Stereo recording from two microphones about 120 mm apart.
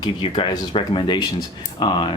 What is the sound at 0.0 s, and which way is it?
Speech, 40° left (ahead or behind).